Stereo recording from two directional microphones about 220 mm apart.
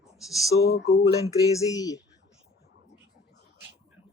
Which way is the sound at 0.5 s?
60° left (ahead or behind).